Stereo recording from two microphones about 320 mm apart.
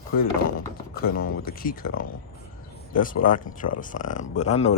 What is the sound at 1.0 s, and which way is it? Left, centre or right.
Speech, left.